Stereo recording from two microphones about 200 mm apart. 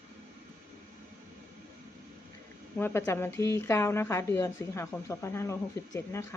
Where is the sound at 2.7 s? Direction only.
10° left (ahead or behind).